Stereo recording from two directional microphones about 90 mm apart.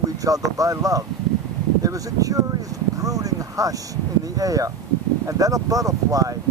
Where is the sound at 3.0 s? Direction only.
40° right (ahead or behind).